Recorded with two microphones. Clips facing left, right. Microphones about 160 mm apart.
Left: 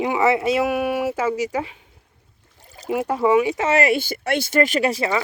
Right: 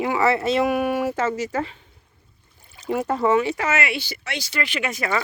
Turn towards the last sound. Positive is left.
turn(degrees=30)  # may be behind; listen again after turning